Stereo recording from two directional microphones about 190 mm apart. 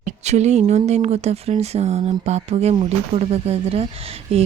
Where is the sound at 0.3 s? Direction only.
35° right (ahead or behind).